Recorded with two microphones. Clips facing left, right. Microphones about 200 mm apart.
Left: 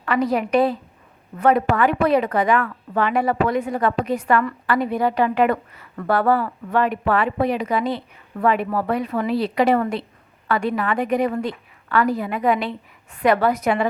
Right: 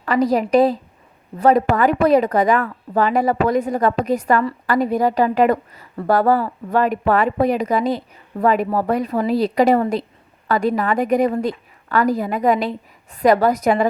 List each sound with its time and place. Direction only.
0.0 s a woman's voice: 35° right (ahead or behind)